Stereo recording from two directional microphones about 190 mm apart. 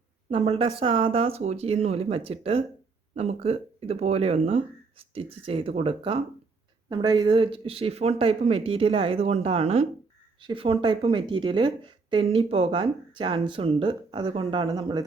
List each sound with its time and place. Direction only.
0.3 s speech: 30° right (ahead or behind)